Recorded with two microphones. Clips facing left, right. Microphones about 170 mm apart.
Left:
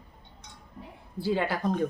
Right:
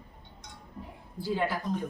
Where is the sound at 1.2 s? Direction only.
70° left (ahead or behind).